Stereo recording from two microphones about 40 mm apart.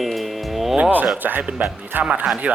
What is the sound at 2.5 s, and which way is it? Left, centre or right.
Speech, right.